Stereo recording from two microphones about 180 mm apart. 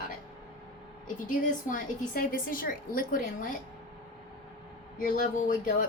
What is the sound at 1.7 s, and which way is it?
A woman's voice, 50° left (ahead or behind).